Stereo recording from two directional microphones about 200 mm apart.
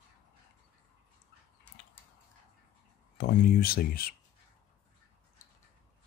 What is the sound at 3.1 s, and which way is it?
Speech, 50° left (ahead or behind).